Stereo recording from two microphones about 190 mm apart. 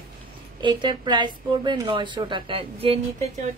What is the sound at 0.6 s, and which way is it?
A woman's voice, 25° right (ahead or behind).